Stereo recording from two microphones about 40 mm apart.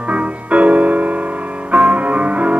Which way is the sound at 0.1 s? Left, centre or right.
Right.